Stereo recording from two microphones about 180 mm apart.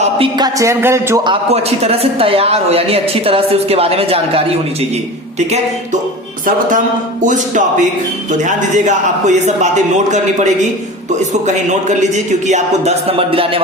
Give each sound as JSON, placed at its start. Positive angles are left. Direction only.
{"t": 0.0, "sound": "a man's voice", "side_deg": -25}
{"t": 6.4, "sound": "a man's voice", "side_deg": -45}